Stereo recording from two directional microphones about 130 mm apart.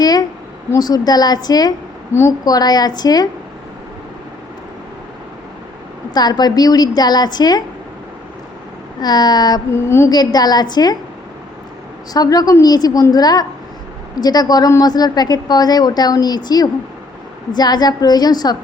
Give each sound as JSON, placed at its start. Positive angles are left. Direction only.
{"t": 0.0, "sound": "a sound", "side_deg": 30}
{"t": 0.7, "sound": "a woman's voice", "side_deg": 30}
{"t": 6.1, "sound": "a woman's voice", "side_deg": 30}
{"t": 9.0, "sound": "a woman's voice", "side_deg": 30}
{"t": 9.7, "sound": "a woman's voice", "side_deg": 20}
{"t": 10.1, "sound": "a woman's voice", "side_deg": 30}
{"t": 12.1, "sound": "a woman's voice", "side_deg": 30}